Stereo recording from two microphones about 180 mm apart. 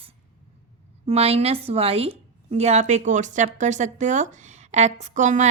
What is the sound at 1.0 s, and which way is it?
A woman's voice, 35° right (ahead or behind).